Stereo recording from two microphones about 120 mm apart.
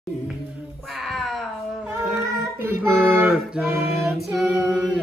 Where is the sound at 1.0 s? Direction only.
Centre (ahead or behind).